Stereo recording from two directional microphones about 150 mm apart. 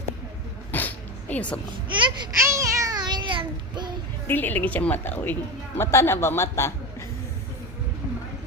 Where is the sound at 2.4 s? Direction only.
20° right (ahead or behind).